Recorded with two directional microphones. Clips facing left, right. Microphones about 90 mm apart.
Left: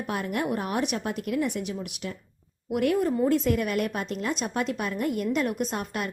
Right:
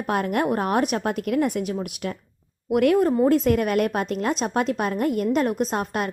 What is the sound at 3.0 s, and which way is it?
A woman's voice, 45° right (ahead or behind).